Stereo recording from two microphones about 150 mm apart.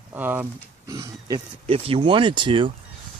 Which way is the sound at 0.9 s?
25° right (ahead or behind).